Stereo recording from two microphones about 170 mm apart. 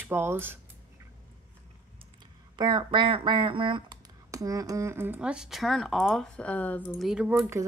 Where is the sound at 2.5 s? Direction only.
30° right (ahead or behind); by 7.0 s 10° left (ahead or behind).